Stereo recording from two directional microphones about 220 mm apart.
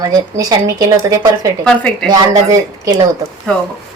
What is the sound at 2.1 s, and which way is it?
Speech, 15° right (ahead or behind).